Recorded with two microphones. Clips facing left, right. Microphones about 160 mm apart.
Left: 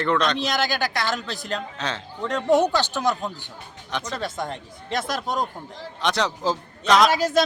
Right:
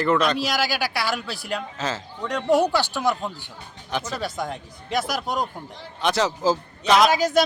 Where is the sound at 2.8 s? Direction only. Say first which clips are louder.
Even; 20° left (ahead or behind).